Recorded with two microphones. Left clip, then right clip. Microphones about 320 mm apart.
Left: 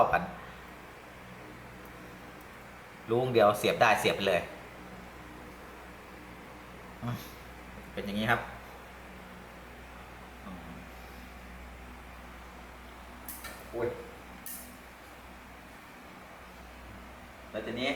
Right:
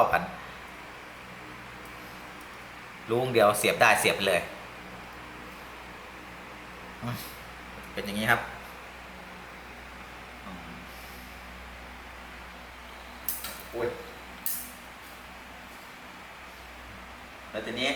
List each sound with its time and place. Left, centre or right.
0.0 s speech: centre
3.1 s speech: left
3.3 s speech: centre
7.9 s speech: centre
17.5 s speech: centre